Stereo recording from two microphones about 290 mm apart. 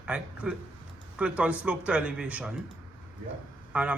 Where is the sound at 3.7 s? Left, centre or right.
Centre.